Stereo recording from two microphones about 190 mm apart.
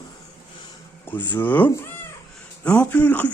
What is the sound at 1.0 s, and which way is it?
Speech, 10° left (ahead or behind).